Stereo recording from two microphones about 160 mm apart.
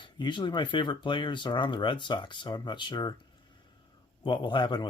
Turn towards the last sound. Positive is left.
turn(degrees=30)  # may be behind; listen again after turning